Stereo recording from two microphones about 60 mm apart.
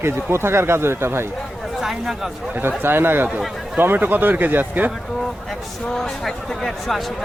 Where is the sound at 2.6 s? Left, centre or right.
Right.